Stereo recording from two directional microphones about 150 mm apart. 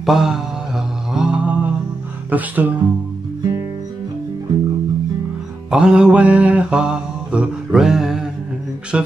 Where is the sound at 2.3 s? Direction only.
10° right (ahead or behind).